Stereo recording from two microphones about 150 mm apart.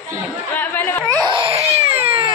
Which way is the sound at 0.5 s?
10° left (ahead or behind).